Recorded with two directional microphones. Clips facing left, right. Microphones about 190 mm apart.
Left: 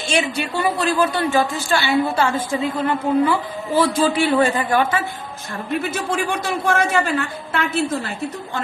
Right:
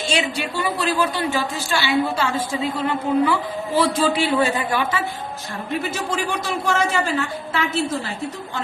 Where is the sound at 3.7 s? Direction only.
45° left (ahead or behind).